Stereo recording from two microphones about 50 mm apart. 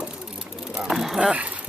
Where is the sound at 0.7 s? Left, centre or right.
Centre.